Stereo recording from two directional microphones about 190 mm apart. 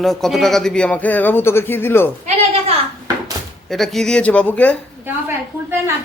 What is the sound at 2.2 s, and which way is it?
Sheep, 30° right (ahead or behind).